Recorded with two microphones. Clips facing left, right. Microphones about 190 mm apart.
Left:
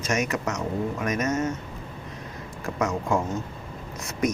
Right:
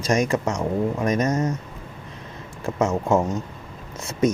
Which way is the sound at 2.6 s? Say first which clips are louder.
Right 4 dB; 25° right (ahead or behind).